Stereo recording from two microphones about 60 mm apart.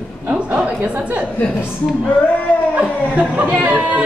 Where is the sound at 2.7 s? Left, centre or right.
Right.